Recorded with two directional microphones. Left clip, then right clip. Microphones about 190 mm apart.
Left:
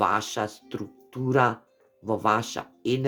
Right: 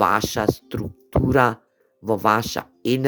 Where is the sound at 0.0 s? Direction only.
40° right (ahead or behind).